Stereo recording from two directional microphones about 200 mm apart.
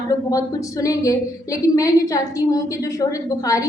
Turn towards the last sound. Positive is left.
turn(degrees=15)  # may be behind; listen again after turning